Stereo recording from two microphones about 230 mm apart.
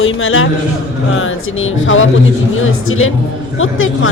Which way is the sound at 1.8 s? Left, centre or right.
Left.